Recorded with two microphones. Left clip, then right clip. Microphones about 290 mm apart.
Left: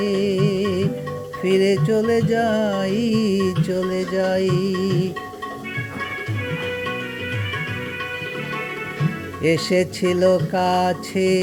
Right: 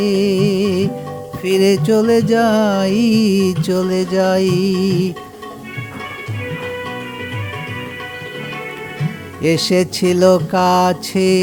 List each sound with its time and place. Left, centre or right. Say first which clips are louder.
0.0 s music: right 5 dB; right
9.4 s music: right 4 dB; centre